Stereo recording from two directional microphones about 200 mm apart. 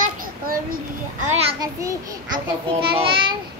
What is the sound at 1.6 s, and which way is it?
A child's voice, 20° right (ahead or behind).